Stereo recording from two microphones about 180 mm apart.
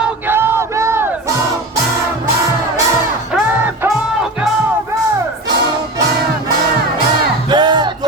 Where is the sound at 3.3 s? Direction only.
10° right (ahead or behind).